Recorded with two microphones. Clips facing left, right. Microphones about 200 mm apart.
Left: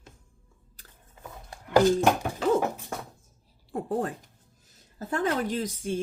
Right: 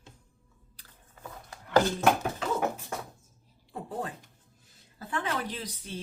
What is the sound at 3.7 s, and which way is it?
Speech, 50° left (ahead or behind).